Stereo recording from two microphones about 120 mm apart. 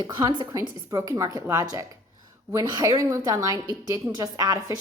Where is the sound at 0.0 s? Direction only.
35° right (ahead or behind).